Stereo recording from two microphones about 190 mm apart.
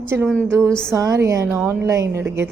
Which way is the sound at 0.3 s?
10° right (ahead or behind).